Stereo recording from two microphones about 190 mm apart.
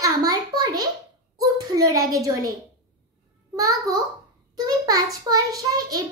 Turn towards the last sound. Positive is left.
turn(degrees=-20)  # may be behind; listen again after turning